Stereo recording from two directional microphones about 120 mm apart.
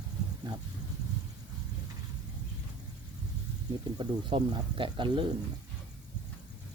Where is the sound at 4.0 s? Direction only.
45° right (ahead or behind).